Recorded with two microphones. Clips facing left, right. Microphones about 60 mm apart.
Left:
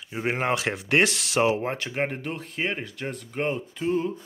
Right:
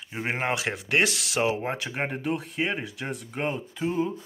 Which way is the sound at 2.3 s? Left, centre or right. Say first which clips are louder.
Right 1 dB; centre.